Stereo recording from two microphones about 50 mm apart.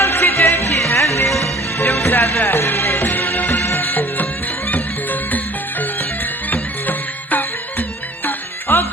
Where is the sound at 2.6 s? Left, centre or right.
Left.